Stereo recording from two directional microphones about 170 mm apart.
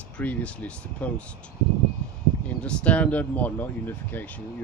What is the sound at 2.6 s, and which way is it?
Speech, 10° left (ahead or behind).